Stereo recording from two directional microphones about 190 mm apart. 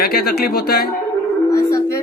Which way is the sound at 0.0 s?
55° left (ahead or behind).